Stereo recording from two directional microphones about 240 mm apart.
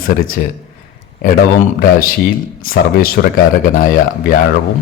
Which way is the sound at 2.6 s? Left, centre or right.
Left.